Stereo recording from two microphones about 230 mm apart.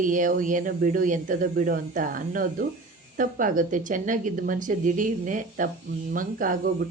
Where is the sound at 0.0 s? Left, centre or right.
Right.